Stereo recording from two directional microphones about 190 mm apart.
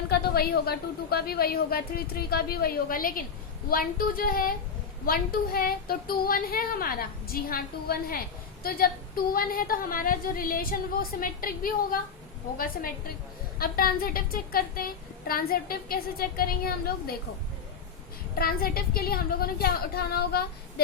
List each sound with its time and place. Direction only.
0.1 s a woman's voice: 55° left (ahead or behind)
9.3 s a woman's voice: 50° left (ahead or behind)
13.6 s a woman's voice: 50° left (ahead or behind)
18.3 s a woman's voice: 50° left (ahead or behind)